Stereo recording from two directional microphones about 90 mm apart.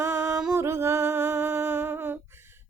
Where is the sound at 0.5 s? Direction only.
30° right (ahead or behind).